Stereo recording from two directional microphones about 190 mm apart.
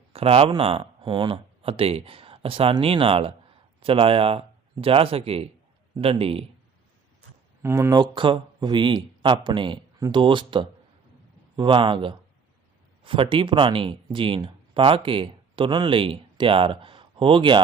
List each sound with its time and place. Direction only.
0.1 s a man's voice: 30° right (ahead or behind)
7.6 s speech: 15° right (ahead or behind)